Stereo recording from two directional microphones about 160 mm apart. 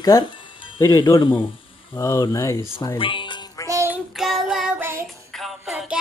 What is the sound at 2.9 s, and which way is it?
Music, 30° left (ahead or behind).